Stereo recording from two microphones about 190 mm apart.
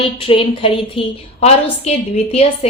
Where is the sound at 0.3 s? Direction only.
30° left (ahead or behind).